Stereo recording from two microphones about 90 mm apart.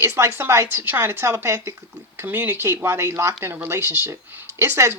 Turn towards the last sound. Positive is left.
turn(degrees=-30)  # may be behind; listen again after turning